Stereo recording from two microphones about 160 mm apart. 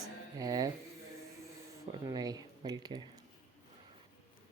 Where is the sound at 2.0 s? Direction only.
25° right (ahead or behind).